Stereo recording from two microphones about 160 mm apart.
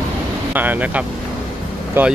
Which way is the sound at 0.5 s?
10° right (ahead or behind).